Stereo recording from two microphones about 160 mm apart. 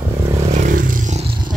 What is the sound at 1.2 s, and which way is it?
Purr, 25° right (ahead or behind).